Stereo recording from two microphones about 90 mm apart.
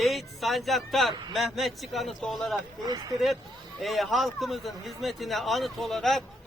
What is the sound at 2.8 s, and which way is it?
Speech, 45° right (ahead or behind).